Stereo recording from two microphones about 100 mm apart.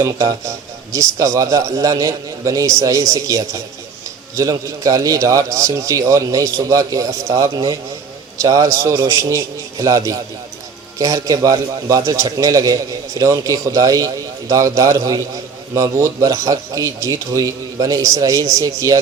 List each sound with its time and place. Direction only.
0.0 s a man's voice: 35° right (ahead or behind)